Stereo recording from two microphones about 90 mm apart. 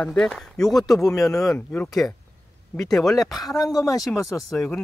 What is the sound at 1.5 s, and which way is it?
Speech, 20° left (ahead or behind).